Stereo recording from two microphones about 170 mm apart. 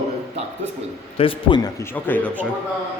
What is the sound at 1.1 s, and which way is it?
Speech, 30° left (ahead or behind).